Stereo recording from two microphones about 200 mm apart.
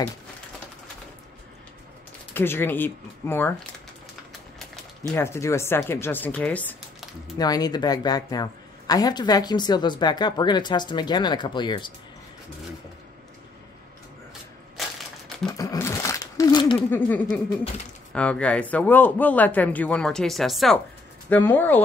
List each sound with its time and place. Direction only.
2.3 s speech: 10° left (ahead or behind)
5.0 s speech: 10° left (ahead or behind)
7.3 s a woman's voice: 20° left (ahead or behind)
14.8 s crushing: centre (ahead or behind)
15.5 s a sound: 15° left (ahead or behind)
16.9 s speech: 10° left (ahead or behind)